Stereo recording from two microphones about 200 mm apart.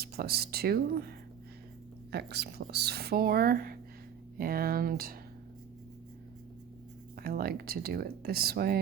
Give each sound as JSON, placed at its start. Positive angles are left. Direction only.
{"t": 0.0, "sound": "speech", "side_deg": -50}
{"t": 2.1, "sound": "speech", "side_deg": -55}
{"t": 7.2, "sound": "speech", "side_deg": -50}